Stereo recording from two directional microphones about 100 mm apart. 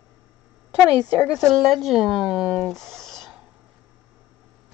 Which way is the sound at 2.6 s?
5° left (ahead or behind).